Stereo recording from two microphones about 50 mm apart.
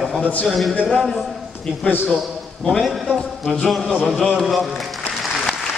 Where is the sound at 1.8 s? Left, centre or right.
Left.